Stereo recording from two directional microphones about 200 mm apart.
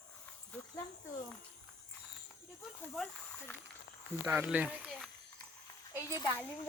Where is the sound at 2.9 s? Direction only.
5° left (ahead or behind).